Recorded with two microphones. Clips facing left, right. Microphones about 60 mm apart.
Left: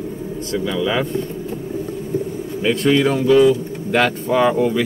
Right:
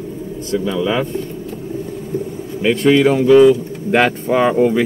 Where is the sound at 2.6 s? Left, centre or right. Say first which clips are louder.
Right 3 dB; centre.